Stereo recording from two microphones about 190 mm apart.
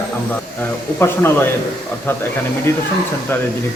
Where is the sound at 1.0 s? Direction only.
10° left (ahead or behind).